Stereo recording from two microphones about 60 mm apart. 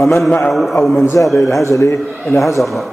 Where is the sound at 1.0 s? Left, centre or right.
Left.